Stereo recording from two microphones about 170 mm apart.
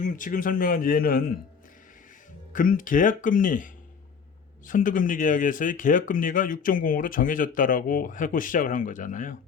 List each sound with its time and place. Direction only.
0.0 s a man's voice: 50° left (ahead or behind)
2.5 s speech: 55° left (ahead or behind)